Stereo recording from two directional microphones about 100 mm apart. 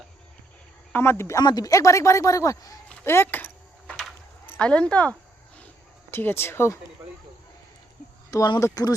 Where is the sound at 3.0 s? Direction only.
25° left (ahead or behind).